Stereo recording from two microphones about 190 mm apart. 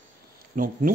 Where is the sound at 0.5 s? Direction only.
45° right (ahead or behind).